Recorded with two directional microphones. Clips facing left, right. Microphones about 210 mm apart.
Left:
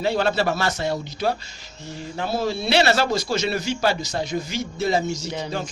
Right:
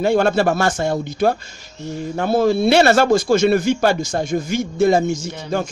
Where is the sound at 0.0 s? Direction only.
50° right (ahead or behind).